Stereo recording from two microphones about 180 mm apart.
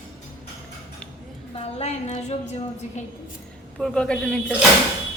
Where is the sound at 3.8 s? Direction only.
5° left (ahead or behind).